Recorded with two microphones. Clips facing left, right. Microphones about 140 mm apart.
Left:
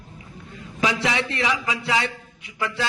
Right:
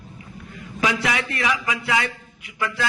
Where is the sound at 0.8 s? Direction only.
25° left (ahead or behind).